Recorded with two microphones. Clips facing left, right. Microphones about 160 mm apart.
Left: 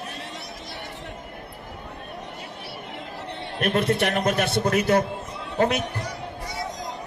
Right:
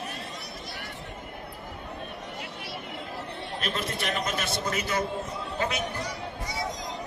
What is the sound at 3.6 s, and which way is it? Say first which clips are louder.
A man's voice: left 11 dB; 60° left (ahead or behind).